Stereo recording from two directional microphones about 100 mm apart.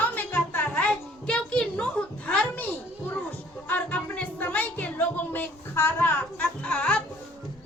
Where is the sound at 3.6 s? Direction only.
15° left (ahead or behind).